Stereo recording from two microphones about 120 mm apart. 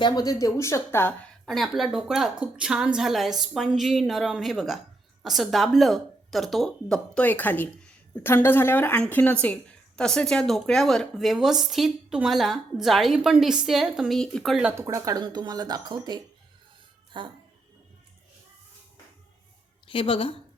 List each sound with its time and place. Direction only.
0.0 s a woman's voice: 30° left (ahead or behind)
1.5 s speech: centre (ahead or behind)
14.8 s speech: 25° right (ahead or behind); by 17.3 s 40° right (ahead or behind)
19.9 s speech: 45° left (ahead or behind)